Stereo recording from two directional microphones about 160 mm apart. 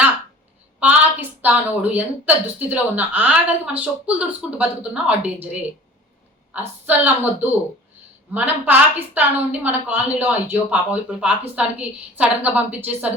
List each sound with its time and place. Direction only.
0.8 s a woman's voice: 10° right (ahead or behind)